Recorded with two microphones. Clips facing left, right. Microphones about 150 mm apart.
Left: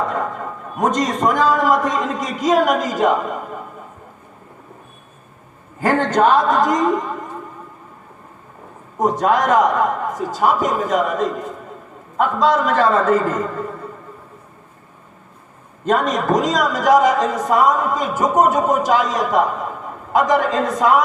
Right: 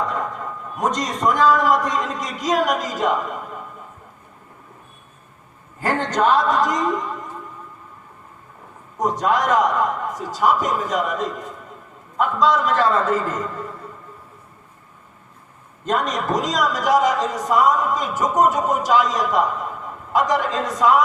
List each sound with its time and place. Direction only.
0.0 s a sound: 50° left (ahead or behind)
0.9 s a man's voice: 5° left (ahead or behind)
2.1 s speech: 50° left (ahead or behind)
3.2 s a sound: 45° left (ahead or behind)
5.8 s a woman's voice: 50° left (ahead or behind)
9.2 s speech: 50° left (ahead or behind)
15.9 s speech: 50° left (ahead or behind)